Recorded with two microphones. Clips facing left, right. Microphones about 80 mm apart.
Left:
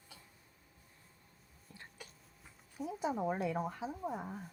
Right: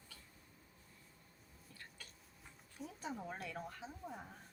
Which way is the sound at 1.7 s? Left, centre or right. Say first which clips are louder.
Left 4 dB; left.